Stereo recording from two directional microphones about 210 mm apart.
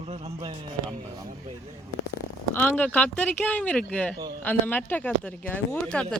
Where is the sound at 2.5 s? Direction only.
10° left (ahead or behind).